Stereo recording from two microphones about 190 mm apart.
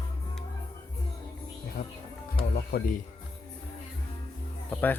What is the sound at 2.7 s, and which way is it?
Speech, 50° left (ahead or behind).